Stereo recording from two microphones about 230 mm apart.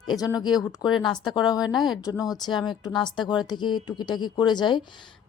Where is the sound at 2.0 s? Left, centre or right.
Centre.